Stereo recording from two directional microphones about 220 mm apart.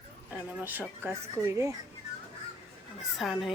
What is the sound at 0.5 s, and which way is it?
Speech, 10° right (ahead or behind).